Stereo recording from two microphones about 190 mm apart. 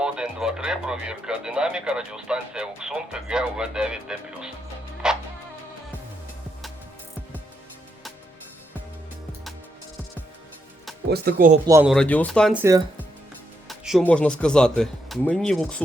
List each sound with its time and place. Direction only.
0.0 s speech: 5° right (ahead or behind)
5.0 s music: 5° right (ahead or behind)
11.1 s speech: 50° right (ahead or behind)
11.6 s speech: 15° right (ahead or behind)
11.9 s speech: 5° left (ahead or behind)
13.7 s music: centre (ahead or behind)
14.0 s speech: 5° left (ahead or behind)